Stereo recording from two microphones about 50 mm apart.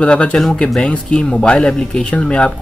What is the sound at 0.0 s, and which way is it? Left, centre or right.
Speech, left.